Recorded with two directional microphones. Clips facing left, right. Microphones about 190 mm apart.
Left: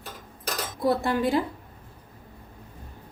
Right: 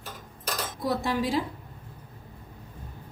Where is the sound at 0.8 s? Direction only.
55° left (ahead or behind).